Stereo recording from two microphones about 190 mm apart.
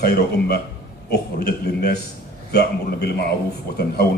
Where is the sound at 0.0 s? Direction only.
55° left (ahead or behind).